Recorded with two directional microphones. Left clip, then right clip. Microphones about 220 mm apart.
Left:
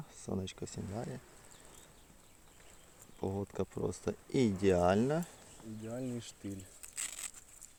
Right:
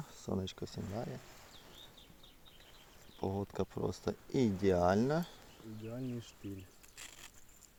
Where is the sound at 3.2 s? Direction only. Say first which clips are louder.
Even; centre (ahead or behind).